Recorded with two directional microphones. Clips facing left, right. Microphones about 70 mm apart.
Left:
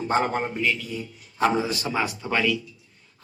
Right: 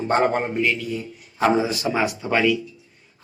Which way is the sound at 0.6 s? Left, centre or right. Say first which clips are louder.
Right 3 dB; centre.